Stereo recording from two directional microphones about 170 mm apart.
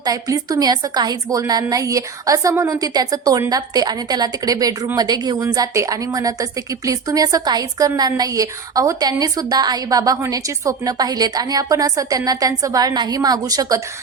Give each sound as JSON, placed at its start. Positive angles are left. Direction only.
{"t": 0.0, "sound": "a woman's voice", "side_deg": -20}